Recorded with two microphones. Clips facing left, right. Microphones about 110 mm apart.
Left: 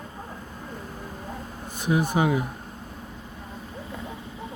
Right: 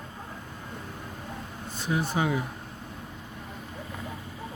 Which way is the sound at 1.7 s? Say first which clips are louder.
Left 5 dB; 15° left (ahead or behind).